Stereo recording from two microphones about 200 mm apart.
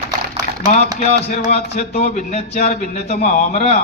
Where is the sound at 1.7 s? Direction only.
35° left (ahead or behind).